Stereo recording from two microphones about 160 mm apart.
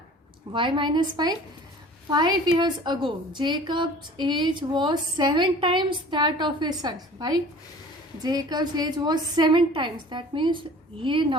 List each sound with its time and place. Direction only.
0.5 s a woman's voice: 30° right (ahead or behind)